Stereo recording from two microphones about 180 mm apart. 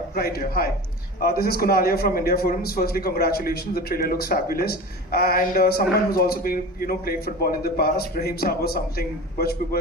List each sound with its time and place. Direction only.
0.1 s a man's voice: 55° left (ahead or behind)